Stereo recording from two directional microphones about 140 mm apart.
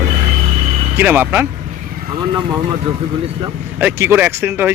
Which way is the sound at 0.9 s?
15° right (ahead or behind).